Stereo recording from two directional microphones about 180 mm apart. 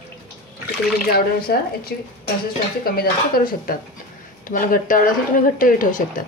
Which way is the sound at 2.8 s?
55° left (ahead or behind).